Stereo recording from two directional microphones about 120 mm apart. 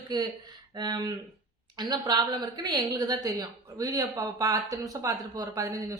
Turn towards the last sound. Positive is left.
turn(degrees=-30)  # may be behind; listen again after turning